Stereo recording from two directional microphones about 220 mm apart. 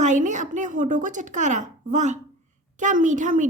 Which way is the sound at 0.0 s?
35° right (ahead or behind).